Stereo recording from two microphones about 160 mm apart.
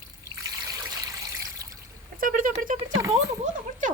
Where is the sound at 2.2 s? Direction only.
60° right (ahead or behind).